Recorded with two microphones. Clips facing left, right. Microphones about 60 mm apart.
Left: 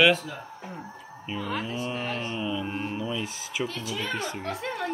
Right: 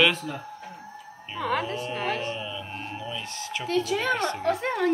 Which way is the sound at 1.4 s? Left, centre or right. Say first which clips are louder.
Right 5 dB; right.